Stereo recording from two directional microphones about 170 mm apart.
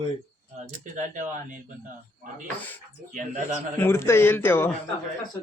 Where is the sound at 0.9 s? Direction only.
50° right (ahead or behind).